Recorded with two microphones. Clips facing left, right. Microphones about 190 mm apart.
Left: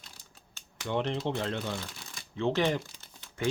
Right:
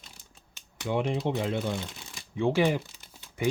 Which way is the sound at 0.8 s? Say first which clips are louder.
Right 3 dB; 10° right (ahead or behind).